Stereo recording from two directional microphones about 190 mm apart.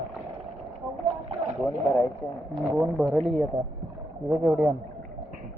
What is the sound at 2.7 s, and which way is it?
A man's voice, 5° right (ahead or behind).